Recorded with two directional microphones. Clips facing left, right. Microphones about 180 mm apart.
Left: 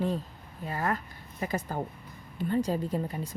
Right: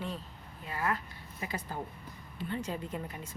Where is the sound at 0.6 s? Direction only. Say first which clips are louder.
Left 3 dB; 40° left (ahead or behind).